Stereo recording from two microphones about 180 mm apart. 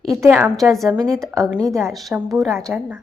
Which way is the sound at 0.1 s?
15° right (ahead or behind).